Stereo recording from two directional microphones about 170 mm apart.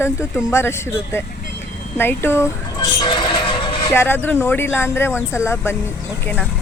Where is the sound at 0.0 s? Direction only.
15° left (ahead or behind).